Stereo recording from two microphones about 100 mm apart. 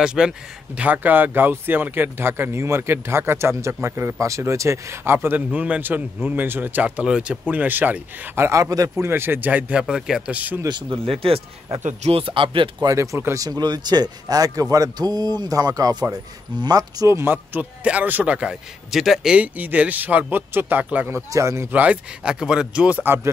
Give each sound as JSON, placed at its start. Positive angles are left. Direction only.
{"t": 0.0, "sound": "a man's voice", "side_deg": -5}
{"t": 8.5, "sound": "a man's voice", "side_deg": -35}
{"t": 11.1, "sound": "speech", "side_deg": -65}
{"t": 12.8, "sound": "speech", "side_deg": -30}
{"t": 17.2, "sound": "a man's voice", "side_deg": -15}
{"t": 21.3, "sound": "speech", "side_deg": -30}
{"t": 21.7, "sound": "a man's voice", "side_deg": -10}